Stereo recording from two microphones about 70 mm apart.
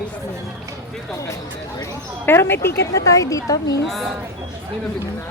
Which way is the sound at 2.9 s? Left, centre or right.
Left.